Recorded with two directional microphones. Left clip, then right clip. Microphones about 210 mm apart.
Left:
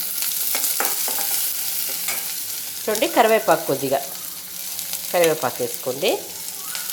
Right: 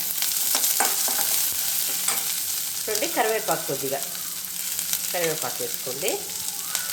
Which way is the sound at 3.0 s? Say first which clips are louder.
Left 8 dB; 45° left (ahead or behind).